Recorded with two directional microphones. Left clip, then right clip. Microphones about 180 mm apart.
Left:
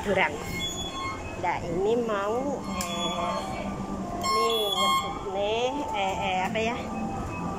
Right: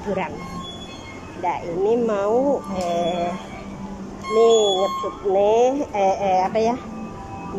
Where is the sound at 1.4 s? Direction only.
15° right (ahead or behind).